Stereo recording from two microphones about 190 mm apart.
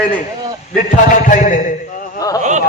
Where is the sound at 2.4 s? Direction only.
40° right (ahead or behind).